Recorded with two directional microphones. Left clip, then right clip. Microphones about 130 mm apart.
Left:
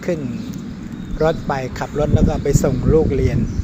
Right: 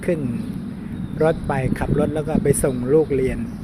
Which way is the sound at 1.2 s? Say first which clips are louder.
Left 1 dB; 30° right (ahead or behind).